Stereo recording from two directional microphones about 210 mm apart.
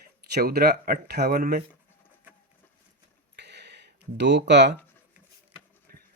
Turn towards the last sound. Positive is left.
turn(degrees=-55)  # may be behind; listen again after turning